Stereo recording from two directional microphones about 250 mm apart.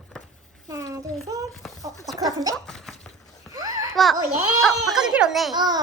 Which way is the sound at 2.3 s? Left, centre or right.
Centre.